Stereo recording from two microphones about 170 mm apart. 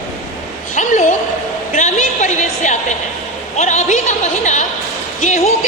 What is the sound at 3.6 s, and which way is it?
A woman's voice, 45° left (ahead or behind).